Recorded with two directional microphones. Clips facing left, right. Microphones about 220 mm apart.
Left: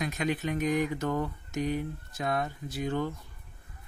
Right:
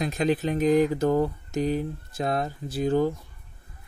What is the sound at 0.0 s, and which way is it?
Speech, 30° right (ahead or behind).